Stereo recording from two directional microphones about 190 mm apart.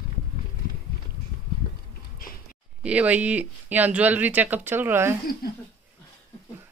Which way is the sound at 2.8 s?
5° right (ahead or behind).